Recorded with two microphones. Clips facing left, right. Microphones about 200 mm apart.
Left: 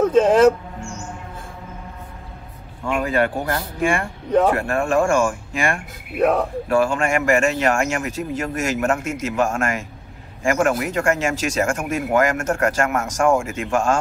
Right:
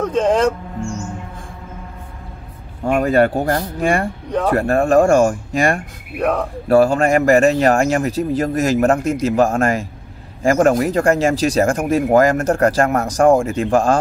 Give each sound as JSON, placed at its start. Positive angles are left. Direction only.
{"t": 0.0, "sound": "speech", "side_deg": 5}
{"t": 2.8, "sound": "speech", "side_deg": -40}
{"t": 6.1, "sound": "speech", "side_deg": 5}
{"t": 6.7, "sound": "speech", "side_deg": -35}